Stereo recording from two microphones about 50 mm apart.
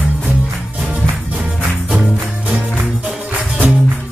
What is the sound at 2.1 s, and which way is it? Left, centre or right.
Music, centre.